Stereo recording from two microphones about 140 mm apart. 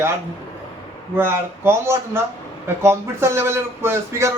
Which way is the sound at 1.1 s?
15° right (ahead or behind).